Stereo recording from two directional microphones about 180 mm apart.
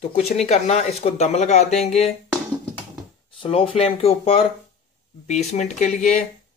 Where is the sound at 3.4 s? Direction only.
30° left (ahead or behind).